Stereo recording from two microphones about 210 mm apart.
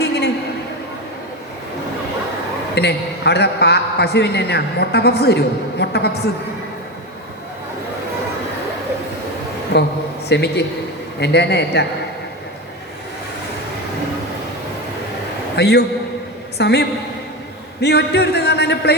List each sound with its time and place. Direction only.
0.0 s a sound: 50° left (ahead or behind)
2.7 s a man's voice: 50° left (ahead or behind)
9.7 s a man's voice: 55° left (ahead or behind)
15.5 s a man's voice: 50° left (ahead or behind)